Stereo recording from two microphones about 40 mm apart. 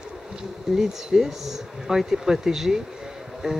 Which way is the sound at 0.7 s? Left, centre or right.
Centre.